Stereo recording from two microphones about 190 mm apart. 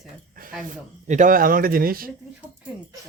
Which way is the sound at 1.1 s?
45° right (ahead or behind).